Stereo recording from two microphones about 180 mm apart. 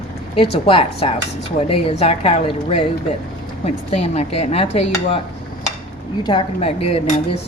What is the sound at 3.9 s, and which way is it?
Speech, 35° left (ahead or behind).